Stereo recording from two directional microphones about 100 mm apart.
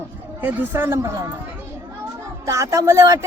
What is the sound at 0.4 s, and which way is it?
Speech, 20° right (ahead or behind).